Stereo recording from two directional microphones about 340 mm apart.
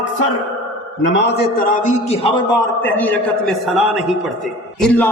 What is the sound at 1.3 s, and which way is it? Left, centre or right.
A man's voice, left.